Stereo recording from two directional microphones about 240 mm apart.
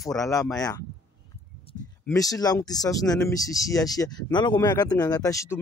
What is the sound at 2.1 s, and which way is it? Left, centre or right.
Speech, centre.